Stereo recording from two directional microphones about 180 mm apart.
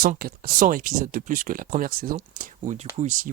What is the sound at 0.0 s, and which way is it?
Speech, 55° right (ahead or behind).